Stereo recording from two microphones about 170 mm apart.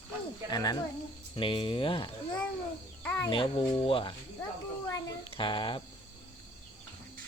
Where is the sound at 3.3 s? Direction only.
30° left (ahead or behind).